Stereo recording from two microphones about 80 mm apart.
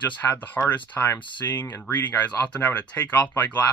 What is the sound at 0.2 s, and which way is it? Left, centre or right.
Speech, left.